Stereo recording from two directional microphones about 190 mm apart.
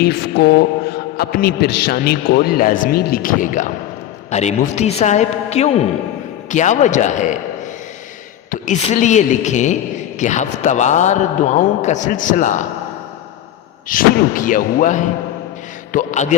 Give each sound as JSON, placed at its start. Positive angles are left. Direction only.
{"t": 0.0, "sound": "a man's voice", "side_deg": 60}
{"t": 8.4, "sound": "a man's voice", "side_deg": 40}
{"t": 13.8, "sound": "a man's voice", "side_deg": 45}